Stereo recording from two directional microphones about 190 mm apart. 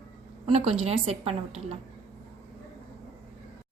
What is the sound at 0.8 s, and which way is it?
Speech, 30° right (ahead or behind).